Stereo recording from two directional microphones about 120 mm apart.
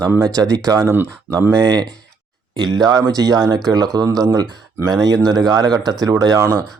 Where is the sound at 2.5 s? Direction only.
40° right (ahead or behind).